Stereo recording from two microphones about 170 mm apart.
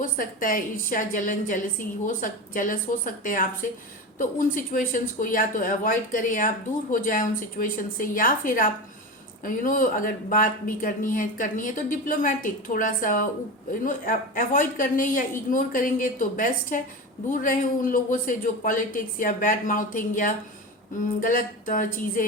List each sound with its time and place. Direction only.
0.0 s speech: 55° left (ahead or behind)